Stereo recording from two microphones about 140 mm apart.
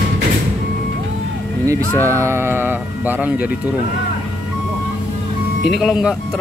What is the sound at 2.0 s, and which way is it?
Speech, 20° right (ahead or behind).